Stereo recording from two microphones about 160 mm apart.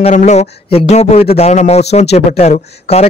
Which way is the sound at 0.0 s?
45° left (ahead or behind).